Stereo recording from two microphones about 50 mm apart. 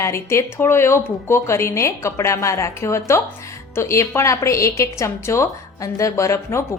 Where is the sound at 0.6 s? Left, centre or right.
Left.